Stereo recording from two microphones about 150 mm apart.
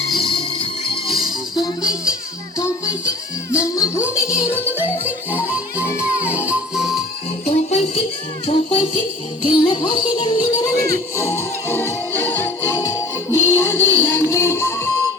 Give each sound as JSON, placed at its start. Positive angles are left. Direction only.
{"t": 0.1, "sound": "music", "side_deg": 0}
{"t": 4.0, "sound": "music", "side_deg": -10}
{"t": 7.5, "sound": "music", "side_deg": 45}
{"t": 8.4, "sound": "speech", "side_deg": 35}
{"t": 9.5, "sound": "music", "side_deg": 35}